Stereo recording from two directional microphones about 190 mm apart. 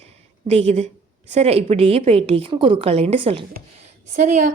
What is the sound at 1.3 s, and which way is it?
A woman's voice, 35° right (ahead or behind).